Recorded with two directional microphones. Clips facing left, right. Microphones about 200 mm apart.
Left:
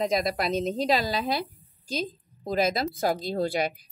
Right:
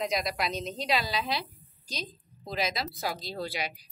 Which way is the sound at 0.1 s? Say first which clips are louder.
Left 5 dB; 50° left (ahead or behind).